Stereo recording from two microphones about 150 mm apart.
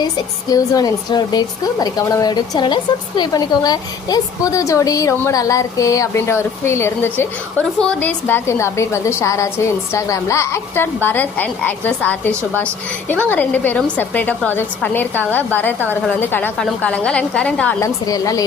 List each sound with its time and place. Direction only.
0.5 s a woman's voice: 25° left (ahead or behind)
13.3 s a woman's voice: 10° left (ahead or behind)
17.7 s a woman's voice: 20° left (ahead or behind)